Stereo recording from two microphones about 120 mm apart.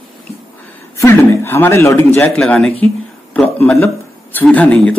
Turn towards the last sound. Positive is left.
turn(degrees=10)  # may be behind; listen again after turning